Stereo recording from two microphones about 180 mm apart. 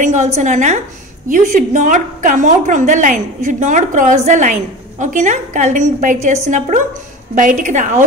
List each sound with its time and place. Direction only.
0.0 s a woman's voice: 40° right (ahead or behind)